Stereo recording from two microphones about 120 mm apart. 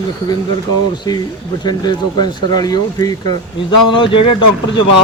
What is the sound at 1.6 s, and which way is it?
Speech, 35° left (ahead or behind).